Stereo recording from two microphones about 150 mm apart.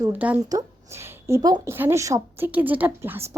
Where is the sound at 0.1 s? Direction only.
10° right (ahead or behind).